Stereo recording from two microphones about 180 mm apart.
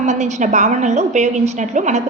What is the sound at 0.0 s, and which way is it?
A woman's voice, 40° right (ahead or behind).